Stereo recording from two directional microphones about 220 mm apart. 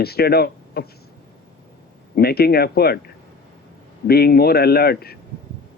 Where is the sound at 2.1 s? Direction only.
45° left (ahead or behind).